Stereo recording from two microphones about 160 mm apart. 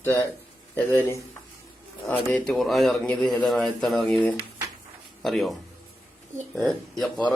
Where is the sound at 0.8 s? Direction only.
10° left (ahead or behind).